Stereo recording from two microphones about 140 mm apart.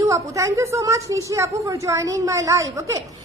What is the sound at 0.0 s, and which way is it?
A woman's voice, 20° right (ahead or behind).